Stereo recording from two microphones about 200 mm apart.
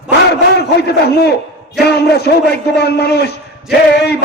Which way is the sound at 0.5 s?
55° left (ahead or behind).